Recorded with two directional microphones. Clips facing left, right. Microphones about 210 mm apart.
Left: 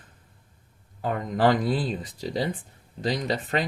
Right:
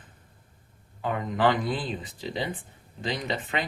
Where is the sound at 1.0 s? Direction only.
40° left (ahead or behind).